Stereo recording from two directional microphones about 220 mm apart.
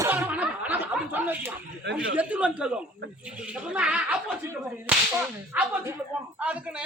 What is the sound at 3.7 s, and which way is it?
Speech, 5° right (ahead or behind).